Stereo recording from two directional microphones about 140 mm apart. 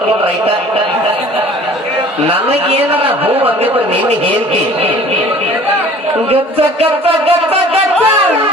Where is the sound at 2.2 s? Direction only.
45° right (ahead or behind).